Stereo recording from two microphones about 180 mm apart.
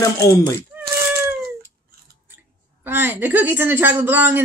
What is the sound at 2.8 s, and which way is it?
A man's voice, 10° right (ahead or behind).